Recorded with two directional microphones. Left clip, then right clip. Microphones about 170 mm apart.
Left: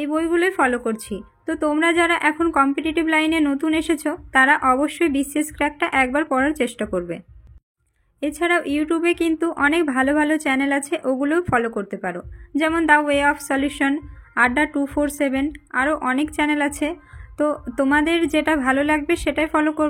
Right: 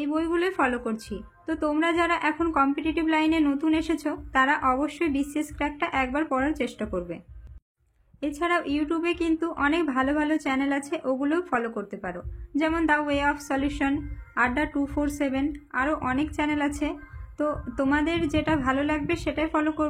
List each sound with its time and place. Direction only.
0.0 s a woman's voice: 30° left (ahead or behind)
8.2 s a woman's voice: 30° left (ahead or behind)